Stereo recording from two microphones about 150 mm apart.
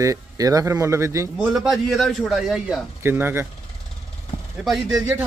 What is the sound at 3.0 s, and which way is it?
Speech, 15° right (ahead or behind).